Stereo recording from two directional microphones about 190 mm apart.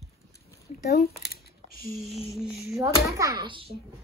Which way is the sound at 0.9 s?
55° left (ahead or behind).